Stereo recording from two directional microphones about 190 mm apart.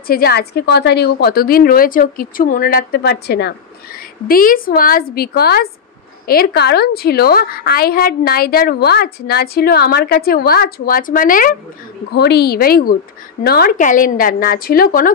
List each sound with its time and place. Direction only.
0.0 s a woman's voice: 55° left (ahead or behind)
4.3 s a woman's voice: 50° left (ahead or behind)
12.1 s a woman's voice: 60° left (ahead or behind)